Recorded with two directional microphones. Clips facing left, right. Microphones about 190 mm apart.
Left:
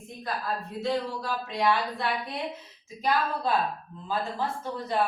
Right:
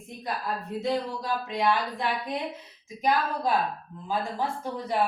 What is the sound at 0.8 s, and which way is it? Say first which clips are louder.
Speech: right 1 dB; 15° right (ahead or behind).